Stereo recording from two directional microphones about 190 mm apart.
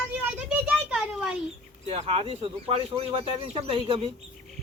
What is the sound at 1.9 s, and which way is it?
Speech, 30° right (ahead or behind).